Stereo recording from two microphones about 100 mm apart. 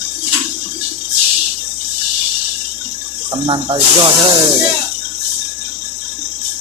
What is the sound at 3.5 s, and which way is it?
Speech, 60° right (ahead or behind).